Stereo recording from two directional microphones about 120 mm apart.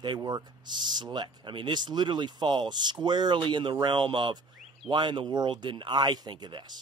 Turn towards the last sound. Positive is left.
turn(degrees=-35)  # may be behind; listen again after turning